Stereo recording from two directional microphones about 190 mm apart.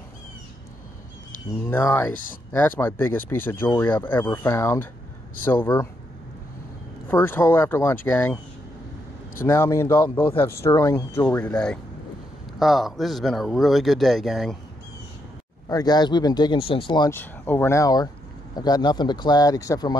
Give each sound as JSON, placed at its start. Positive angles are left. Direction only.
{"t": 1.7, "sound": "speech", "side_deg": 10}
{"t": 7.1, "sound": "speech", "side_deg": 10}
{"t": 9.4, "sound": "speech", "side_deg": 15}
{"t": 15.7, "sound": "speech", "side_deg": 20}
{"t": 17.1, "sound": "speech", "side_deg": 10}